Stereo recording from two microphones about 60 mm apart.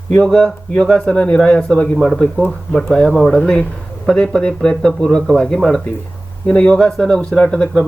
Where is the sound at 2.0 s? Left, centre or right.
Centre.